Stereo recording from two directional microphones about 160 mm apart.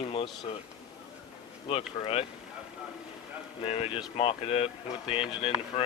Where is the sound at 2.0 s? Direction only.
30° left (ahead or behind).